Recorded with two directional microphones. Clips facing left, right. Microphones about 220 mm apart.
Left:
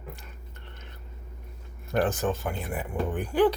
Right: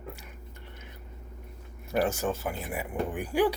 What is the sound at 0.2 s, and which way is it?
Whispering, 10° right (ahead or behind).